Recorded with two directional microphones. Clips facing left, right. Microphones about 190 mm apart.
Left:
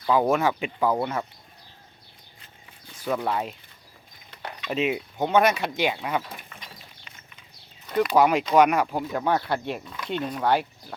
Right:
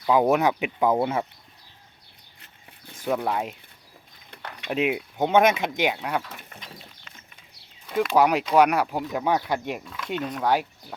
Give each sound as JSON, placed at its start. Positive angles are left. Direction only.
{"t": 0.0, "sound": "speech", "side_deg": -10}
{"t": 3.0, "sound": "speech", "side_deg": -10}
{"t": 4.7, "sound": "speech", "side_deg": -10}
{"t": 5.9, "sound": "speech", "side_deg": 0}
{"t": 7.9, "sound": "speech", "side_deg": -5}
{"t": 9.8, "sound": "speech", "side_deg": 0}